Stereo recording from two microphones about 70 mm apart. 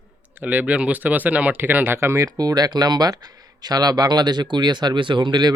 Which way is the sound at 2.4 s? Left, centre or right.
Right.